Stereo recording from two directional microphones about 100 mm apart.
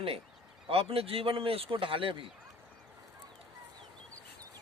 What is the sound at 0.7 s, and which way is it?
Speech, 70° right (ahead or behind).